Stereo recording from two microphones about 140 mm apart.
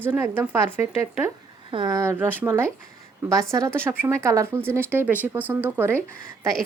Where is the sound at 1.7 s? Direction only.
30° right (ahead or behind).